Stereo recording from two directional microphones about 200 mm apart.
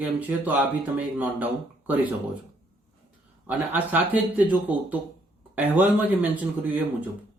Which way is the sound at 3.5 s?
10° right (ahead or behind).